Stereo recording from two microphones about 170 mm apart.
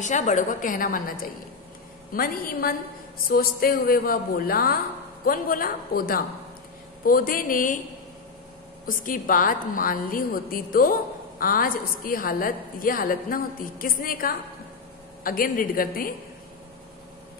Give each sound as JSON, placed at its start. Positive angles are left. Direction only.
{"t": 0.0, "sound": "a woman's voice", "side_deg": 45}
{"t": 8.8, "sound": "a woman's voice", "side_deg": 55}